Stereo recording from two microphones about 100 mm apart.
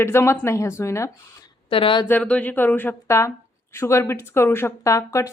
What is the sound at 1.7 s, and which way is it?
Speech, 60° left (ahead or behind).